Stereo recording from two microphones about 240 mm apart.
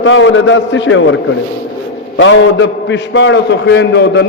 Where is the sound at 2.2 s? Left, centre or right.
Left.